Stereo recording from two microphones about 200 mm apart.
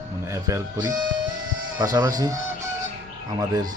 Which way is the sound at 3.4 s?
20° right (ahead or behind).